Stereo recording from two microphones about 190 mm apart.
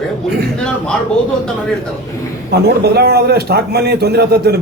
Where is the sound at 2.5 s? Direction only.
60° right (ahead or behind).